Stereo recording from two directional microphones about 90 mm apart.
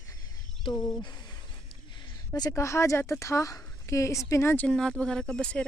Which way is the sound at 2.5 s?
35° left (ahead or behind).